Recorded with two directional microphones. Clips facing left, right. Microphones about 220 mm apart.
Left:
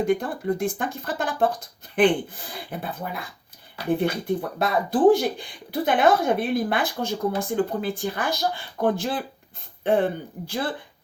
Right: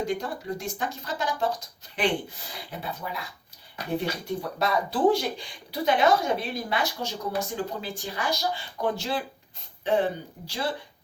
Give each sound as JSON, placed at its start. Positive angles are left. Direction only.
{"t": 0.0, "sound": "speech", "side_deg": 55}